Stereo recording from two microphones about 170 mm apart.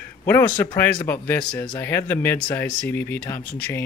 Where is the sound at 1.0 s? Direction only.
10° left (ahead or behind).